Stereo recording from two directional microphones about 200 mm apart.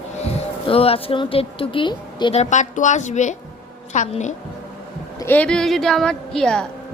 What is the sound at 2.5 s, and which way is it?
A woman's voice, 35° left (ahead or behind).